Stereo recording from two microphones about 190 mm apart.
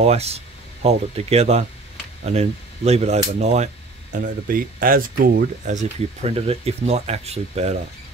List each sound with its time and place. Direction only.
0.0 s speech: 35° right (ahead or behind)